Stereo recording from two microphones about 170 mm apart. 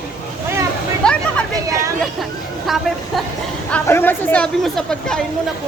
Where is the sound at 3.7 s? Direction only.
15° left (ahead or behind).